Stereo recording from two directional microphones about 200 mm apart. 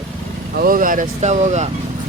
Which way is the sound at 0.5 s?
45° right (ahead or behind).